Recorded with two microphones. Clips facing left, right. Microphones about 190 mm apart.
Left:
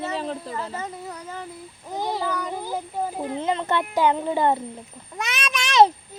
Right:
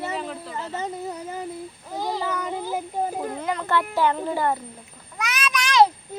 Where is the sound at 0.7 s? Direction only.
25° right (ahead or behind).